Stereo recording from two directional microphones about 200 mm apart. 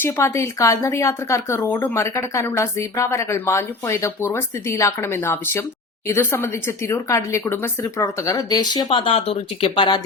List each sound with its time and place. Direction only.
0.0 s speech: 10° left (ahead or behind)